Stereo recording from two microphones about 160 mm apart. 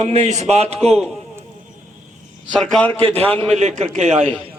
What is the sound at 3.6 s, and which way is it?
Speech, 45° right (ahead or behind).